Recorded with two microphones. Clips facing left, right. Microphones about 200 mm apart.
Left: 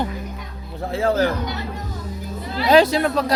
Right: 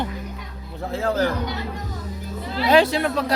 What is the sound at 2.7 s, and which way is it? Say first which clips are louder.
Speech: left 3 dB; 40° left (ahead or behind).